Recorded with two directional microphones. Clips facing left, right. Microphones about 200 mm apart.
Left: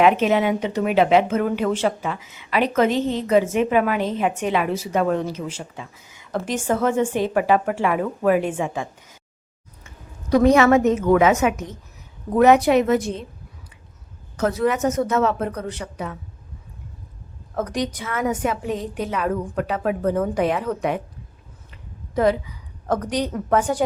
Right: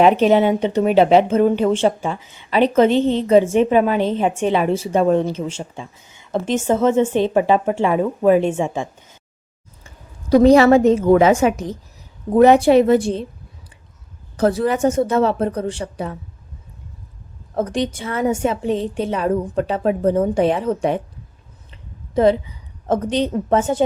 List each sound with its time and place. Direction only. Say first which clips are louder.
0.0 s a woman's voice: right 4 dB; 35° right (ahead or behind)
14.3 s a woman's voice: right 3 dB; 30° right (ahead or behind)
17.5 s a woman's voice: right 4 dB; 30° right (ahead or behind)